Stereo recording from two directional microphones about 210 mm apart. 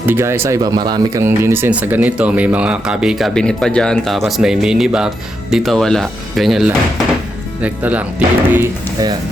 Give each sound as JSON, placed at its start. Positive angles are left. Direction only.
{"t": 0.0, "sound": "speech", "side_deg": -10}
{"t": 8.5, "sound": "speech", "side_deg": -20}